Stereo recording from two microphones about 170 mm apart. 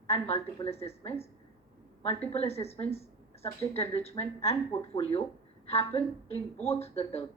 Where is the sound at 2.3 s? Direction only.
35° left (ahead or behind).